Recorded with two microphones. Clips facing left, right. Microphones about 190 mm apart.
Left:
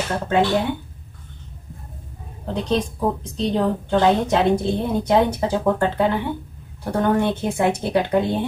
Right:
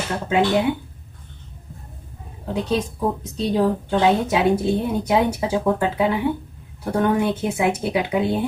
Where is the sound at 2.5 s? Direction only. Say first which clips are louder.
Even; 5° right (ahead or behind).